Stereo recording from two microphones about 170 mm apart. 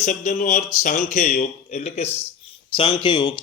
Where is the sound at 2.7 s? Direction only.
30° left (ahead or behind).